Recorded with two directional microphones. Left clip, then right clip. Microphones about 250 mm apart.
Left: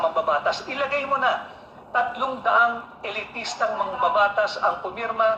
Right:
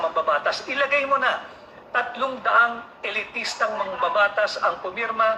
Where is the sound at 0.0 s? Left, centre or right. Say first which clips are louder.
Even; right.